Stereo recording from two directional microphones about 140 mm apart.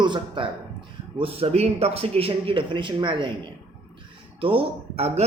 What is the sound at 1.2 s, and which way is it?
Speech, 45° right (ahead or behind).